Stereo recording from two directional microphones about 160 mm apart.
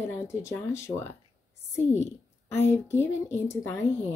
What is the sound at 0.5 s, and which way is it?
Speech, 15° left (ahead or behind).